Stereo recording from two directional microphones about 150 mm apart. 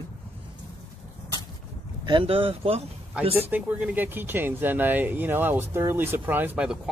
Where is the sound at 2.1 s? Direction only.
35° right (ahead or behind).